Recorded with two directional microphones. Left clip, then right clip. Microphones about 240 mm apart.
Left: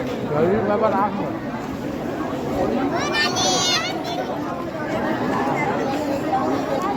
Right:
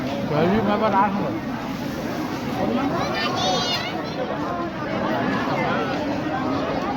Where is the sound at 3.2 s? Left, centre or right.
Left.